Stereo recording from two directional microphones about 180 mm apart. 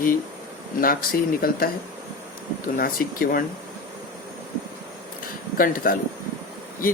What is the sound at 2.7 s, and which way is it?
Speech, 55° left (ahead or behind).